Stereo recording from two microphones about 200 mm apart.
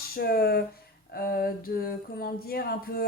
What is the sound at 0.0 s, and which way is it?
Speech, 50° left (ahead or behind).